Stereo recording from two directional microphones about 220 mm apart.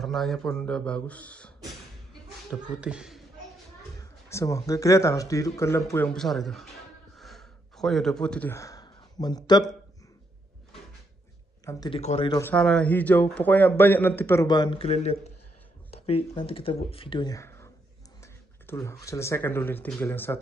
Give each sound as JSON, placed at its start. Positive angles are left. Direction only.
{"t": 0.0, "sound": "speech", "side_deg": 0}
{"t": 4.0, "sound": "a man's voice", "side_deg": 15}
{"t": 7.2, "sound": "gasp", "side_deg": 0}
{"t": 11.6, "sound": "speech", "side_deg": 15}
{"t": 12.0, "sound": "speech", "side_deg": 30}
{"t": 12.3, "sound": "a man's voice", "side_deg": 10}